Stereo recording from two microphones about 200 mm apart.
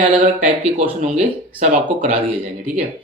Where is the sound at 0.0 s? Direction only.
45° right (ahead or behind).